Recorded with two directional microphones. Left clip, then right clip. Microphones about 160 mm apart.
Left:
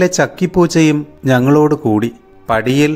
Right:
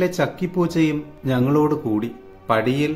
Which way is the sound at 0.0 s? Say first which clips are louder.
Left 8 dB; 50° left (ahead or behind).